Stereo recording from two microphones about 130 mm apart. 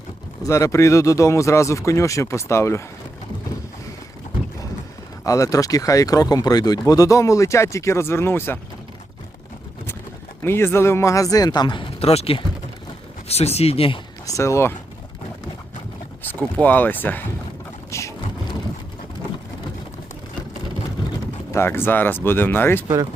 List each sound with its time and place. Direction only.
0.4 s speech: 25° left (ahead or behind)
5.2 s speech: 25° left (ahead or behind)
10.4 s speech: 20° left (ahead or behind); by 14.0 s 45° left (ahead or behind)
14.3 s speech: 25° left (ahead or behind)
16.6 s speech: 15° left (ahead or behind)
17.9 s boat: 20° left (ahead or behind)
21.0 s vehicle: 35° left (ahead or behind)
21.5 s speech: 20° left (ahead or behind)